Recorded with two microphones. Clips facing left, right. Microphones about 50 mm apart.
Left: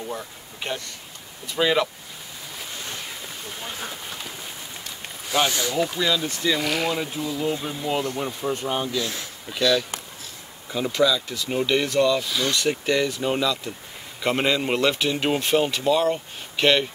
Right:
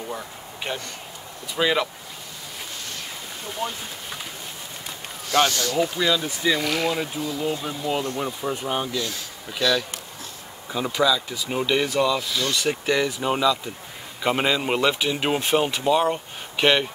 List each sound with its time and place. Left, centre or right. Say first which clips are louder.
0.1 s speech: even; centre
5.3 s speech: right 2 dB; centre
5.8 s speech: right 2 dB; centre
8.2 s speech: even; centre